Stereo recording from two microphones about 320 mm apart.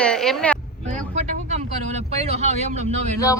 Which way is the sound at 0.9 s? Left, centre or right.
Right.